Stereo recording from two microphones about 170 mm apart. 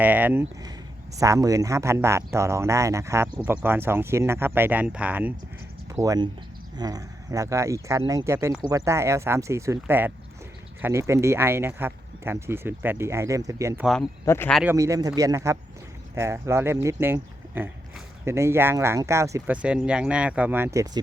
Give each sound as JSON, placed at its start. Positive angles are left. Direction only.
{"t": 0.0, "sound": "speech", "side_deg": -10}
{"t": 5.9, "sound": "speech", "side_deg": -20}
{"t": 14.3, "sound": "speech", "side_deg": 15}
{"t": 14.6, "sound": "speech", "side_deg": -15}
{"t": 19.6, "sound": "speech", "side_deg": -5}